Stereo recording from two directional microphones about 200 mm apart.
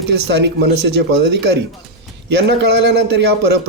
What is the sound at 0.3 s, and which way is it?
Speech, 55° right (ahead or behind).